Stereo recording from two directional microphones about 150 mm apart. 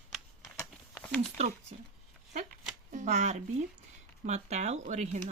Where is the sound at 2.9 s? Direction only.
50° right (ahead or behind).